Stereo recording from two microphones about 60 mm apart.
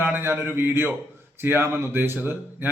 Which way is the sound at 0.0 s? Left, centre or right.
Right.